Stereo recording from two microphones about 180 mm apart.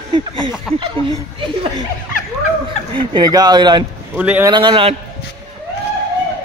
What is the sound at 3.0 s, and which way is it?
Speech, 25° right (ahead or behind).